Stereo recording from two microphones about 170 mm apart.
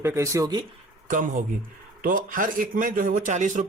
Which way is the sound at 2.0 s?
55° right (ahead or behind).